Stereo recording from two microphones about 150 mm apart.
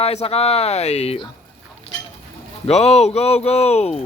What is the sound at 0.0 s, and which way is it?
Speech, 45° left (ahead or behind).